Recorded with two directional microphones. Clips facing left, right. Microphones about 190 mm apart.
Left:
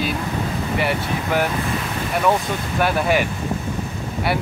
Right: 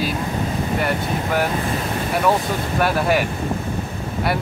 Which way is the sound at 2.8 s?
Centre (ahead or behind).